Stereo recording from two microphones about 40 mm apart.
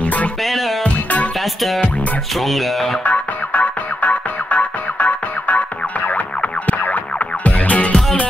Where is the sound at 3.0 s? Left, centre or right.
Left.